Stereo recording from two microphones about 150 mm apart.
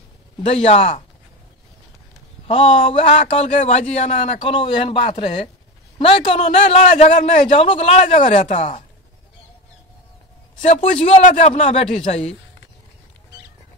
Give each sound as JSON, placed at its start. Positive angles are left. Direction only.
{"t": 0.4, "sound": "a man's voice", "side_deg": 40}
{"t": 2.4, "sound": "a man's voice", "side_deg": 45}
{"t": 4.4, "sound": "a man's voice", "side_deg": 35}
{"t": 7.6, "sound": "a man's voice", "side_deg": 45}
{"t": 11.0, "sound": "a man's voice", "side_deg": 50}